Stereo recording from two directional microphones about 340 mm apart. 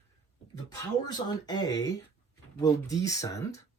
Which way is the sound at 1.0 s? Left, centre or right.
Centre.